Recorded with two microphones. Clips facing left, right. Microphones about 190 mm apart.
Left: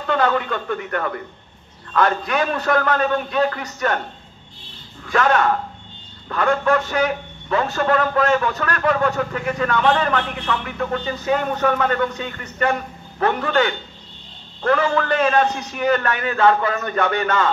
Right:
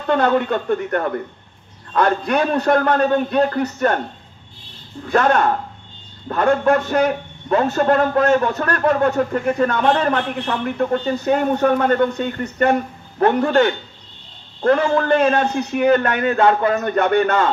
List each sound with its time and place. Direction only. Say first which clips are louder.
0.0 s a man's voice: right 3 dB; 45° right (ahead or behind)
5.1 s a man's voice: right 2 dB; 40° right (ahead or behind)
15.5 s a man's voice: right 5 dB; 55° right (ahead or behind)